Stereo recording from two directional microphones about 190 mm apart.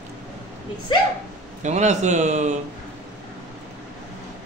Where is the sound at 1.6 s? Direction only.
40° right (ahead or behind).